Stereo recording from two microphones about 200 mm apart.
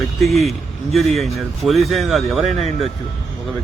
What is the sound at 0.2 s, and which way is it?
Speech, centre (ahead or behind).